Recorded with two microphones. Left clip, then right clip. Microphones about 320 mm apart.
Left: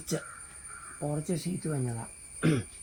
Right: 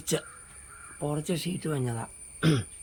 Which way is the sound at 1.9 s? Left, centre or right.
Centre.